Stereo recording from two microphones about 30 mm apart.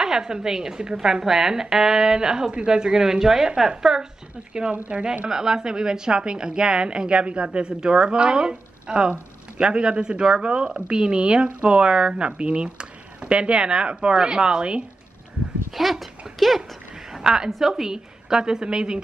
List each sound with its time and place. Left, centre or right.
0.0 s a woman's voice: right
4.9 s speech: right
5.3 s a woman's voice: right
7.6 s a woman's voice: right
15.7 s speech: centre
17.2 s a woman's voice: right
17.5 s a woman's voice: centre; by 18.9 s right